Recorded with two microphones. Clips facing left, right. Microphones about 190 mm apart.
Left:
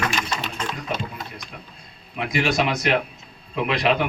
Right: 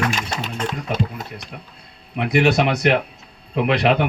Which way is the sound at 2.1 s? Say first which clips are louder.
Right 5 dB; 65° right (ahead or behind).